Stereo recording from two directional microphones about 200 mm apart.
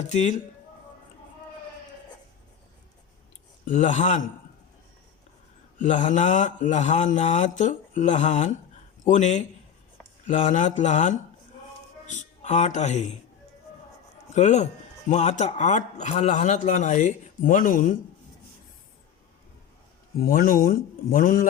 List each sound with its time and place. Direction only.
0.1 s a man's voice: 35° left (ahead or behind)
3.7 s a man's voice: 35° left (ahead or behind)
5.8 s a man's voice: 40° left (ahead or behind)
14.3 s a man's voice: 35° left (ahead or behind)
20.1 s speech: 45° left (ahead or behind)